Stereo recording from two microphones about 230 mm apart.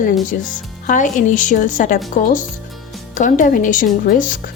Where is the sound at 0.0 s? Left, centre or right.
Left.